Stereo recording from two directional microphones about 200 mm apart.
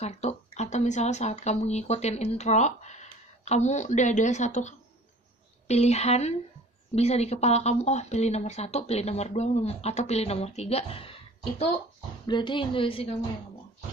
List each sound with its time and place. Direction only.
0.0 s a woman's voice: 35° left (ahead or behind)